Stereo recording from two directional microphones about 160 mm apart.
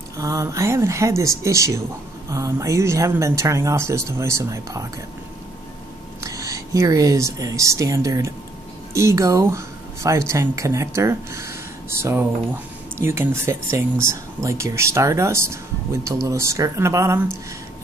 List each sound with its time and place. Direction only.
0.2 s speech: 20° right (ahead or behind)
6.2 s speech: 20° right (ahead or behind)